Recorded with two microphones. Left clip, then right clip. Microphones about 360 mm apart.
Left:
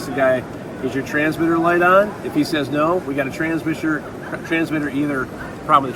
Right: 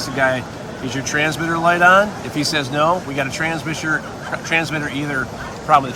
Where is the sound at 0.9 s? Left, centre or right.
Right.